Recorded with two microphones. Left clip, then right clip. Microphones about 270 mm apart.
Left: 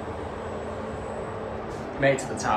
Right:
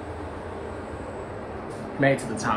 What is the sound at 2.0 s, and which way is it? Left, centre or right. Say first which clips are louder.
Speech: even; centre.